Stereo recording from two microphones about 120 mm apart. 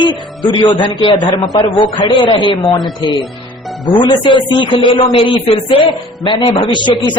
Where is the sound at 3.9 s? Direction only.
40° left (ahead or behind).